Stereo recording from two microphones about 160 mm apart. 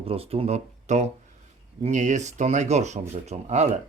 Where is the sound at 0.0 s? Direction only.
35° right (ahead or behind).